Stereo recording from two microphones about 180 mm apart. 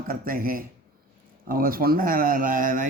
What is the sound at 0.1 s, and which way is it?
A man's voice, 55° right (ahead or behind).